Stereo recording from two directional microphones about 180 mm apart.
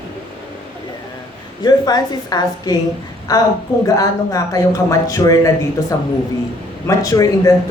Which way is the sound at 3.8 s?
20° left (ahead or behind).